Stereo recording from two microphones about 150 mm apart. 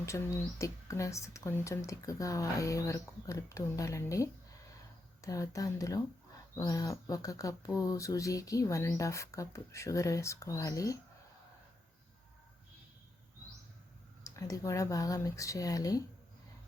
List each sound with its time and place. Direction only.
0.0 s speech: 20° left (ahead or behind)
14.3 s speech: 20° left (ahead or behind)